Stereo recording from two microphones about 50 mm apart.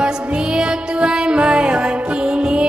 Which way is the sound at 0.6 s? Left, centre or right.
Centre.